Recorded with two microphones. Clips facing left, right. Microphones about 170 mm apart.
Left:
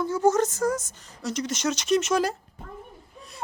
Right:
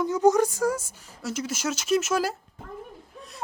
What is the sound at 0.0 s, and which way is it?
A woman's voice, 15° right (ahead or behind).